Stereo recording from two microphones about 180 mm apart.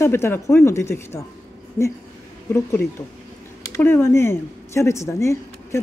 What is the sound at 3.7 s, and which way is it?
Speech, 15° left (ahead or behind).